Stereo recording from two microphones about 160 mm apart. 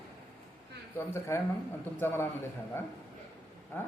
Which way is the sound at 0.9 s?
15° left (ahead or behind).